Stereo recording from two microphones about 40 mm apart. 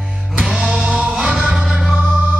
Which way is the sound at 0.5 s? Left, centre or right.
Centre.